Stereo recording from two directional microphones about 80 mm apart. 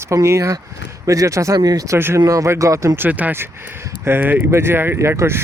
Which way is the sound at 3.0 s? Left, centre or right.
Centre.